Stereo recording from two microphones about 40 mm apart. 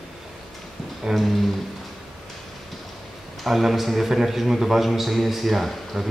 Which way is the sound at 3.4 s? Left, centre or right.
Centre.